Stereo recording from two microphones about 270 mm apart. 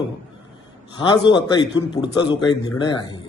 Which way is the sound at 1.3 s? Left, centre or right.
Centre.